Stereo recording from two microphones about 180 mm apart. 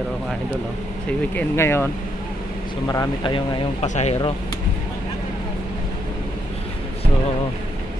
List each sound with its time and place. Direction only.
1.3 s speech: 15° left (ahead or behind)
2.9 s speech: 20° left (ahead or behind)
3.8 s speech: 40° left (ahead or behind)